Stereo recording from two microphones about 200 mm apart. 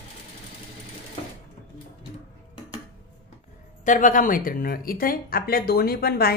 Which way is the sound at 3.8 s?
40° left (ahead or behind).